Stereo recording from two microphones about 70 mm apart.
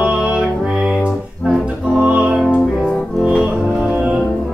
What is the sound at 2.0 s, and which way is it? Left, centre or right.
Music, centre.